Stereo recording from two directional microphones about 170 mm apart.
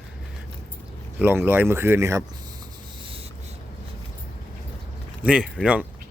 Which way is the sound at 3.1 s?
35° right (ahead or behind).